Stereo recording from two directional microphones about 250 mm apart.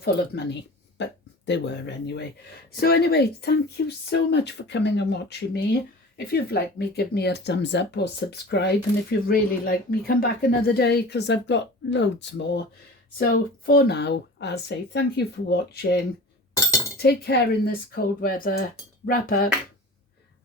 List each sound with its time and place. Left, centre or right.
0.0 s speech: left
17.0 s speech: left